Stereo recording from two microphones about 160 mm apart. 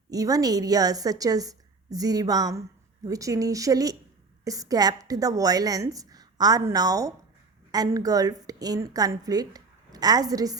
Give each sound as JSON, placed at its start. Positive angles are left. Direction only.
{"t": 0.1, "sound": "a woman's voice", "side_deg": -20}